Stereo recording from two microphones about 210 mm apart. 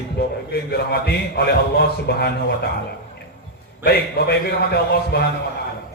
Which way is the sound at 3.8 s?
50° left (ahead or behind).